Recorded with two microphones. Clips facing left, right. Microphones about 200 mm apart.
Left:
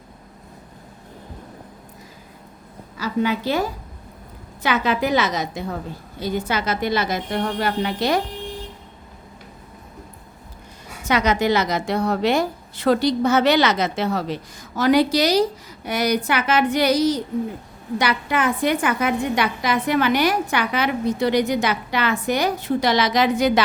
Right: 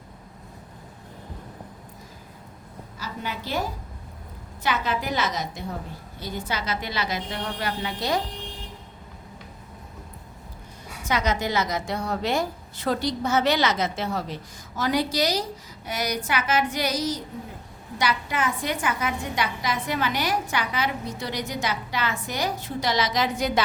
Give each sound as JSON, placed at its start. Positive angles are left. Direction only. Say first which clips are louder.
{"t": 3.0, "sound": "a woman's voice", "louder": "left 12 dB", "side_deg": 80}
{"t": 6.1, "sound": "a woman's voice", "louder": "left 8 dB", "side_deg": 90}
{"t": 6.6, "sound": "speech", "louder": "left 7 dB", "side_deg": 50}
{"t": 11.0, "sound": "a woman's voice", "louder": "left 6 dB", "side_deg": 70}